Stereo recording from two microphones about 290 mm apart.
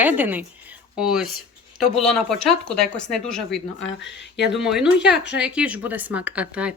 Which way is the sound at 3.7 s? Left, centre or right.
Left.